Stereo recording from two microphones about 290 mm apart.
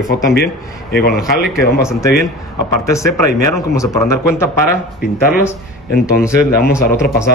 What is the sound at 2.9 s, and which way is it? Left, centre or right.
Speech, centre.